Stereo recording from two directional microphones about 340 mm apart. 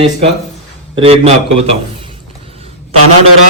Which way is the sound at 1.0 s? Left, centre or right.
Centre.